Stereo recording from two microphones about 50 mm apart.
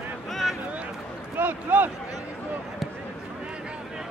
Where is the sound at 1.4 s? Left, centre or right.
Right.